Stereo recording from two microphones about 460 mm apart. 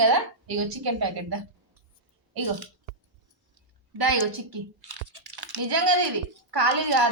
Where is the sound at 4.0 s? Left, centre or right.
Right.